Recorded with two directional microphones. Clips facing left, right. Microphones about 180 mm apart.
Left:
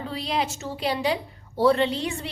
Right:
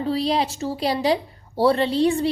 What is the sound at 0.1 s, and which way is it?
A woman's voice, 35° right (ahead or behind).